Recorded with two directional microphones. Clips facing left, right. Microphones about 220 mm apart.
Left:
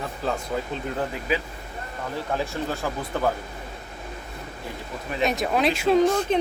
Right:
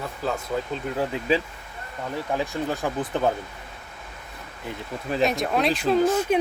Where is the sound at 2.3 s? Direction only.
15° right (ahead or behind).